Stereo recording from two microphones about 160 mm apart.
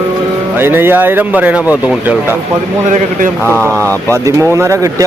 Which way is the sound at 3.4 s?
15° right (ahead or behind).